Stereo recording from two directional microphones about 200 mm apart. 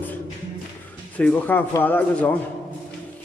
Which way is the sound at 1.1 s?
5° left (ahead or behind).